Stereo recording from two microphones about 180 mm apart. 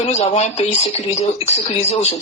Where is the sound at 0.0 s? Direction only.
35° left (ahead or behind).